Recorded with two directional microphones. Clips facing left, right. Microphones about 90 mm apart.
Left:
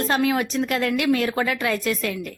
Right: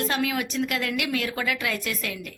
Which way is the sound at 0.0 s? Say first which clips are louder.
Left 5 dB; 35° left (ahead or behind).